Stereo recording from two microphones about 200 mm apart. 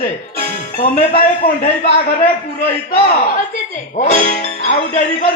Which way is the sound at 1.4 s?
45° left (ahead or behind).